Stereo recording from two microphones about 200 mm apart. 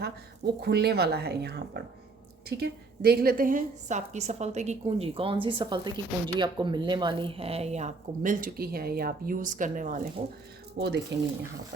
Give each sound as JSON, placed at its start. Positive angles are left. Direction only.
{"t": 0.6, "sound": "a woman's voice", "side_deg": -55}
{"t": 10.8, "sound": "speech", "side_deg": -55}